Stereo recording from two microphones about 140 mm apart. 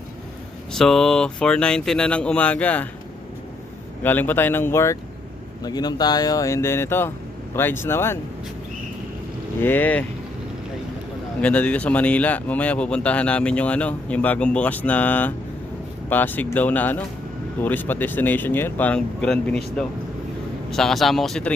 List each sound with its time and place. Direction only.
0.7 s speech: 5° left (ahead or behind)
4.0 s speech: 15° left (ahead or behind)
5.6 s speech: 30° left (ahead or behind)
9.6 s speech: 15° left (ahead or behind)
11.3 s speech: 10° left (ahead or behind)